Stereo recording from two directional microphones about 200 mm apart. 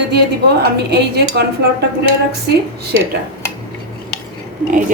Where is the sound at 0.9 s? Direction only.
55° right (ahead or behind).